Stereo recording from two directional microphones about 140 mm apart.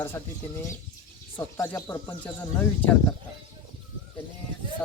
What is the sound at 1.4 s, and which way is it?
Speech, 20° left (ahead or behind).